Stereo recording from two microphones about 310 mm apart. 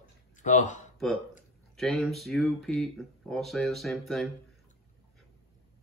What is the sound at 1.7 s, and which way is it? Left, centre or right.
Speech, centre.